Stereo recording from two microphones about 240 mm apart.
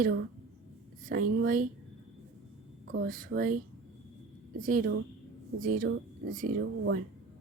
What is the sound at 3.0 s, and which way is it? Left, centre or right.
A woman's voice, right.